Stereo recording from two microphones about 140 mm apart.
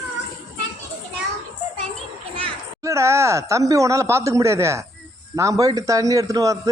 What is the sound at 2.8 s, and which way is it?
Speech, 20° right (ahead or behind).